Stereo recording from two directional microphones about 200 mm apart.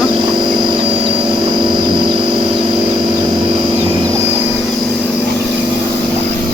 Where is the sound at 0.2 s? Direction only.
20° right (ahead or behind).